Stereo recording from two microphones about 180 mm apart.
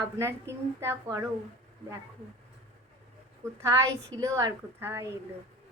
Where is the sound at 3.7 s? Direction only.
20° right (ahead or behind).